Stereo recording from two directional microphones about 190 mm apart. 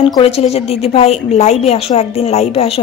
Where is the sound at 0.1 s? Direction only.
30° left (ahead or behind).